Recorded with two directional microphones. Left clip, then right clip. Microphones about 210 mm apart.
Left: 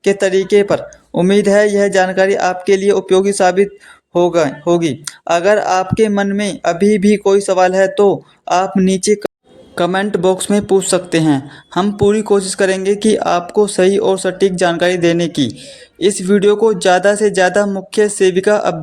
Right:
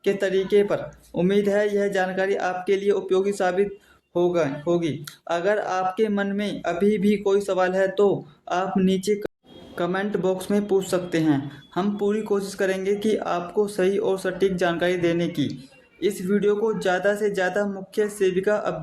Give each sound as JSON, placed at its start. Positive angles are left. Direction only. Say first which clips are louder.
{"t": 0.0, "sound": "speech", "louder": "left 9 dB", "side_deg": 40}